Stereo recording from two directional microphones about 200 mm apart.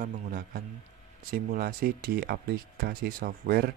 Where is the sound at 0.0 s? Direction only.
45° right (ahead or behind).